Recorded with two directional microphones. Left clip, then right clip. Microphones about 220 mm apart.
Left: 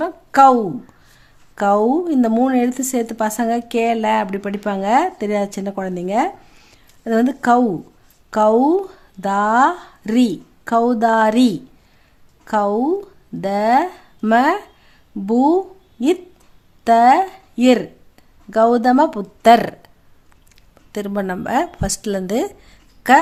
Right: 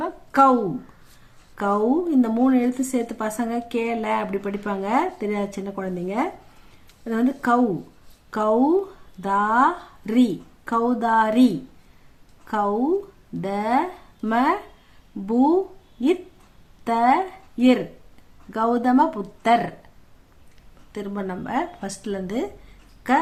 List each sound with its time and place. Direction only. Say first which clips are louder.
0.0 s a sound: left 6 dB; 40° left (ahead or behind)
1.5 s speech: left 6 dB; 40° left (ahead or behind)
16.8 s speech: left 8 dB; 40° left (ahead or behind)
20.9 s a woman's voice: left 7 dB; 50° left (ahead or behind)